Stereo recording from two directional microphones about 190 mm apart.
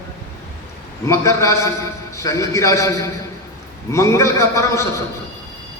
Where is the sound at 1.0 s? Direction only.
15° left (ahead or behind).